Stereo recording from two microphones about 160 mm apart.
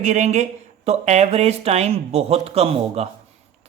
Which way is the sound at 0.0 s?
45° right (ahead or behind).